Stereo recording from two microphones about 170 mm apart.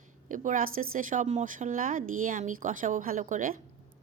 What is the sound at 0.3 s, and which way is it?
A woman's voice, 50° right (ahead or behind).